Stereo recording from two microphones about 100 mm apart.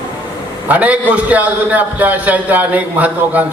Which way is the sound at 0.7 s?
15° right (ahead or behind).